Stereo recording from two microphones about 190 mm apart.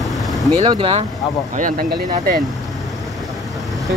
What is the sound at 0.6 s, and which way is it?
Speech, 30° right (ahead or behind).